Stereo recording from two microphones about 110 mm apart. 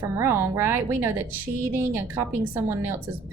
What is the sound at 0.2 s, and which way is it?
A woman's voice, 25° right (ahead or behind).